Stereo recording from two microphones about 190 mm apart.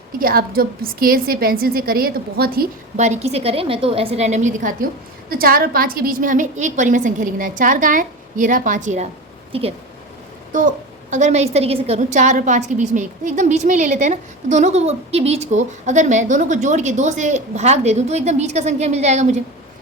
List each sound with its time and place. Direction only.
0.2 s a woman's voice: 50° right (ahead or behind)
3.0 s a woman's voice: 35° right (ahead or behind)
10.5 s a woman's voice: 45° right (ahead or behind)